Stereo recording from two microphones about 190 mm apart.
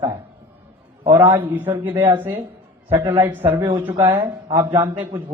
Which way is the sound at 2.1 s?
10° right (ahead or behind).